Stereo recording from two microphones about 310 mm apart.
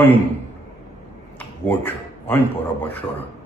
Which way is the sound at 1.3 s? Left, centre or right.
Centre.